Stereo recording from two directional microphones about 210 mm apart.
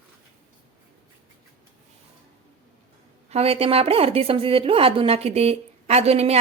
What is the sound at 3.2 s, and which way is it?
A woman's voice, 30° right (ahead or behind).